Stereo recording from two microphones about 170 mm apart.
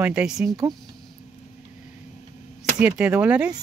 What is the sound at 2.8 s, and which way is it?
Speech, 10° right (ahead or behind).